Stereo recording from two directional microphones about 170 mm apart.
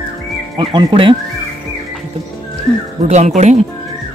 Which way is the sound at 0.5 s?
30° right (ahead or behind).